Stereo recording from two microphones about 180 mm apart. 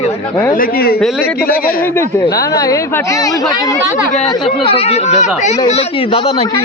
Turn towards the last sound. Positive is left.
turn(degrees=35)  # may be behind; listen again after turning